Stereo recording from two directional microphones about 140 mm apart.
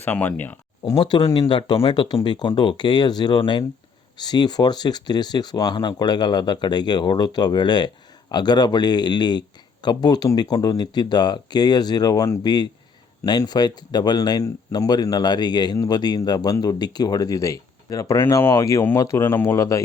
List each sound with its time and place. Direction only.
0.0 s speech: 10° left (ahead or behind)
0.9 s speech: 30° left (ahead or behind)